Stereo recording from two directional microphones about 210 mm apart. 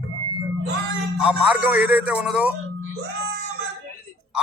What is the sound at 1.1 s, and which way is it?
A man's voice, 5° right (ahead or behind).